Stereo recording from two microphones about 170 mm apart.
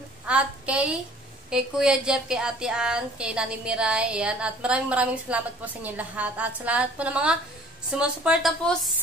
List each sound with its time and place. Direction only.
0.3 s a woman's voice: 5° right (ahead or behind)